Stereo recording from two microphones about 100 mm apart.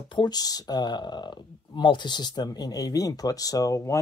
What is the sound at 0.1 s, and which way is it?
Speech, 45° left (ahead or behind).